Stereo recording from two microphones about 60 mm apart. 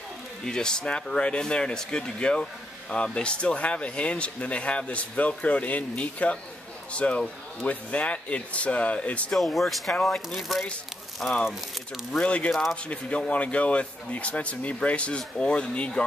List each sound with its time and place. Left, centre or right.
0.5 s a man's voice: centre
9.3 s speech: centre
11.2 s a man's voice: centre